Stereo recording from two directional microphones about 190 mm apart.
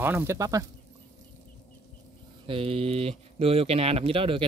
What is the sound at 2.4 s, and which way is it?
Speech, 30° right (ahead or behind).